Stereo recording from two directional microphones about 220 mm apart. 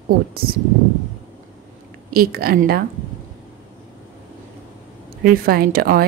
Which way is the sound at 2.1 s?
40° right (ahead or behind).